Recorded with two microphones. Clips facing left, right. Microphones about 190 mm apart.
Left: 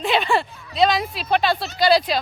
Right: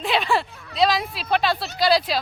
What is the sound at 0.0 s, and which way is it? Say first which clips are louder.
Speech: left 2 dB; centre (ahead or behind).